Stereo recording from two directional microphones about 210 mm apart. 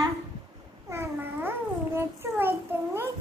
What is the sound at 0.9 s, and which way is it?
Babbling, 10° right (ahead or behind).